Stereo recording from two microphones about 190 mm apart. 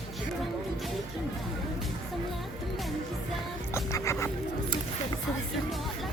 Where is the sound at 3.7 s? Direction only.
15° left (ahead or behind).